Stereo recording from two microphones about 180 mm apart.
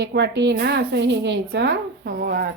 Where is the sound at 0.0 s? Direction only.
70° right (ahead or behind).